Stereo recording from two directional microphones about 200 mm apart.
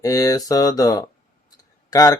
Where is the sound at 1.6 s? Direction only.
15° left (ahead or behind).